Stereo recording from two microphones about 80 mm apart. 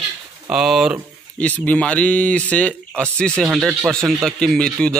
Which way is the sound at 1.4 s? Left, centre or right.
Centre.